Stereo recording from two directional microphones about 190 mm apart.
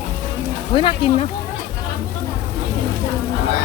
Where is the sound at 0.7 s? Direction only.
25° left (ahead or behind).